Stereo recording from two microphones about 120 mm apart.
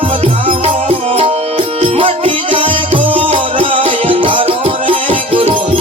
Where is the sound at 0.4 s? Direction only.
55° right (ahead or behind).